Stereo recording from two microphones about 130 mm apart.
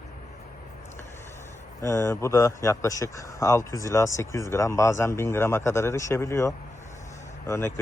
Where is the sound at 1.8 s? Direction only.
20° left (ahead or behind).